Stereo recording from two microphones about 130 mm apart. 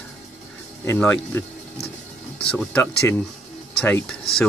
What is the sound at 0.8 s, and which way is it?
Speech, 20° left (ahead or behind).